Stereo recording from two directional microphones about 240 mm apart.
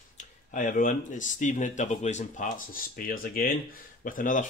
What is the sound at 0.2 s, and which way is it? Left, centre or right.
Speech, left.